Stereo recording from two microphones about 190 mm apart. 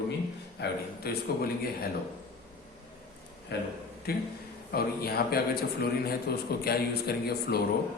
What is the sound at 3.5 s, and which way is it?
A man's voice, 60° left (ahead or behind).